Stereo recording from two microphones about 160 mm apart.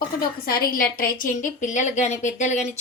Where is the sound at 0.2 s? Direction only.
65° left (ahead or behind).